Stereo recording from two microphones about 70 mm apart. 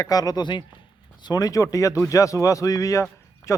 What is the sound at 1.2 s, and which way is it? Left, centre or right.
Speech, left.